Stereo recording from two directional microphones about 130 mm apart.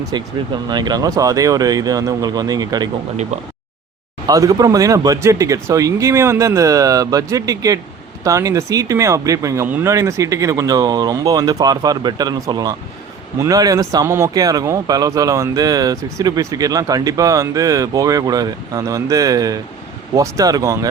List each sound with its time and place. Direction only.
0.0 s speech: 35° right (ahead or behind)
4.3 s speech: 25° right (ahead or behind)
9.6 s speech: 15° right (ahead or behind)